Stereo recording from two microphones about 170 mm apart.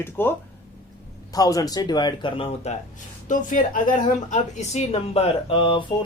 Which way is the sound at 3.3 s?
50° left (ahead or behind).